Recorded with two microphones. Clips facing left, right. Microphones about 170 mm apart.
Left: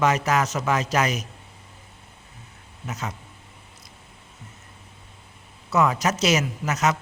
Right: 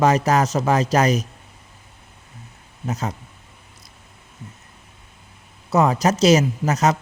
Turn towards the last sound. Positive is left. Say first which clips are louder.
# right 4 dB
turn(degrees=-35)  # may be behind; listen again after turning